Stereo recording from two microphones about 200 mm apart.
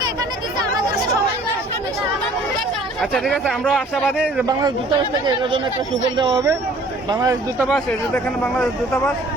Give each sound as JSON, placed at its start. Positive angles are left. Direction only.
{"t": 3.0, "sound": "speech", "side_deg": 0}
{"t": 5.2, "sound": "speech", "side_deg": -25}
{"t": 7.7, "sound": "speech", "side_deg": 5}